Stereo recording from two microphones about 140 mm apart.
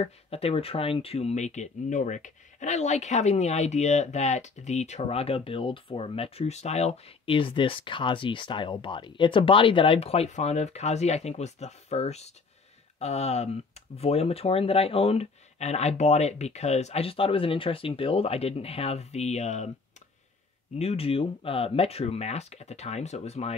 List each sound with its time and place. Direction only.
0.0 s speech: 45° left (ahead or behind)
20.7 s speech: 45° left (ahead or behind)